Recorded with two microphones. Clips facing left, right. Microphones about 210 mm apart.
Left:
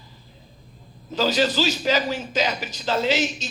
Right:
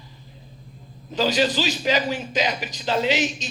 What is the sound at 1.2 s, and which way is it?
Speech, 40° left (ahead or behind).